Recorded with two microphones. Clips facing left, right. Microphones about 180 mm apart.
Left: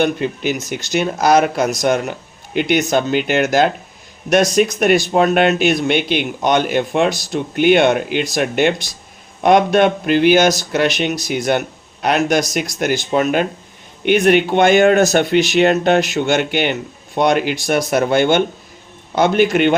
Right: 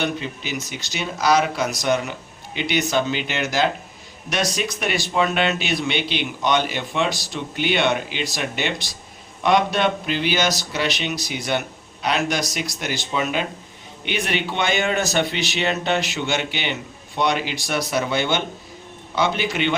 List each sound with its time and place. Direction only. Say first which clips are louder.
0.0 s speech: left 9 dB; 50° left (ahead or behind)